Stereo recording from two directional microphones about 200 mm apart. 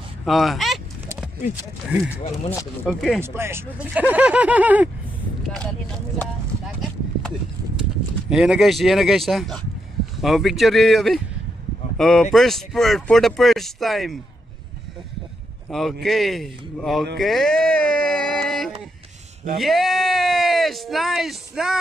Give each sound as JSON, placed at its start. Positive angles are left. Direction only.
{"t": 0.2, "sound": "speech", "side_deg": 0}
{"t": 3.2, "sound": "speech", "side_deg": -10}
{"t": 5.5, "sound": "speech", "side_deg": 5}
{"t": 15.7, "sound": "speech", "side_deg": 0}
{"t": 17.2, "sound": "music", "side_deg": 0}
{"t": 19.6, "sound": "speech", "side_deg": 0}